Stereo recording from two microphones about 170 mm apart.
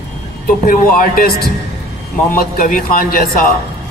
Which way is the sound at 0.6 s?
55° left (ahead or behind).